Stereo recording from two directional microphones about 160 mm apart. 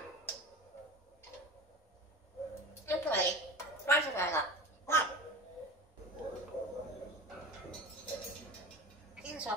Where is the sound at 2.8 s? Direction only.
15° left (ahead or behind).